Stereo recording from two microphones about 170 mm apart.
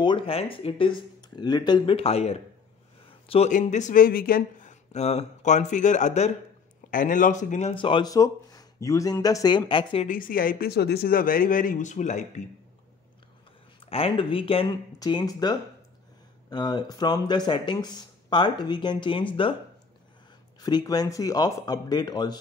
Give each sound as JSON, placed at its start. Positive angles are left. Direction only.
{"t": 0.0, "sound": "speech", "side_deg": 30}
{"t": 7.7, "sound": "speech", "side_deg": 30}
{"t": 10.0, "sound": "speech", "side_deg": 55}
{"t": 13.7, "sound": "speech", "side_deg": 35}
{"t": 20.6, "sound": "speech", "side_deg": 25}